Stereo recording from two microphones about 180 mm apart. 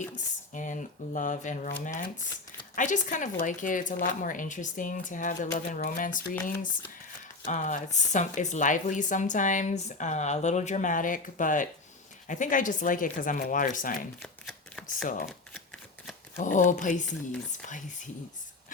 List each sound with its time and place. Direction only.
0.5 s speech: 45° left (ahead or behind)
7.4 s speech: 45° left (ahead or behind)
14.2 s shuffling cards: centre (ahead or behind)
15.0 s speech: 50° left (ahead or behind)
15.3 s shuffling cards: centre (ahead or behind)
16.4 s speech: 45° left (ahead or behind)